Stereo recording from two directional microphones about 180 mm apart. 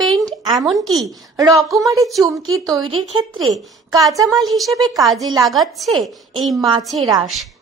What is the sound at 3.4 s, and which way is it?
Speech, centre (ahead or behind).